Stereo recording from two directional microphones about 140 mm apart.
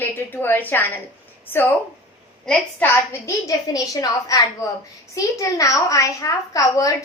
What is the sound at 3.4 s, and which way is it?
A woman's voice, 25° left (ahead or behind).